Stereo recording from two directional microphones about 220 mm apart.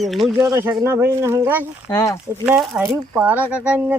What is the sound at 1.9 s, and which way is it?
Speech, 15° left (ahead or behind).